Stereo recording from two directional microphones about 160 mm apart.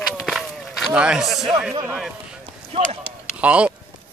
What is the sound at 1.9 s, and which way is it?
Speech, 5° right (ahead or behind).